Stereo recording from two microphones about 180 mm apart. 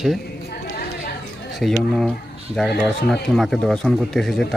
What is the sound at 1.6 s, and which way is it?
Speech, centre (ahead or behind).